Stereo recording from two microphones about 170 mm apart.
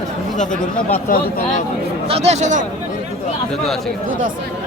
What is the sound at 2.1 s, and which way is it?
Speech, 40° right (ahead or behind).